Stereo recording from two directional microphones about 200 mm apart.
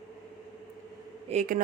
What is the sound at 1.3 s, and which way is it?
Speech, 40° right (ahead or behind).